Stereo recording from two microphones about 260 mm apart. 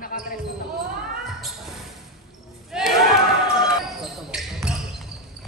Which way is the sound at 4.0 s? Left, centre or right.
Centre.